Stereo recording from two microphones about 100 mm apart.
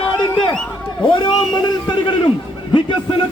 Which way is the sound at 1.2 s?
50° left (ahead or behind).